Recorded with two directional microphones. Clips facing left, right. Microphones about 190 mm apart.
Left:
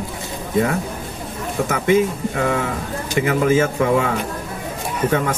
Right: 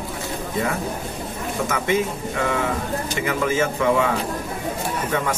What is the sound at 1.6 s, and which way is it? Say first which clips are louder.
Speech: left 5 dB; 40° left (ahead or behind).